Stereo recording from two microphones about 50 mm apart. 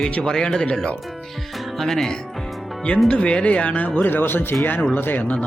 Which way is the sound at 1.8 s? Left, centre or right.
Centre.